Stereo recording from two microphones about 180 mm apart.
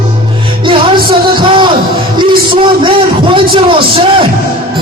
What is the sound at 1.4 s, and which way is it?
Music, 30° right (ahead or behind).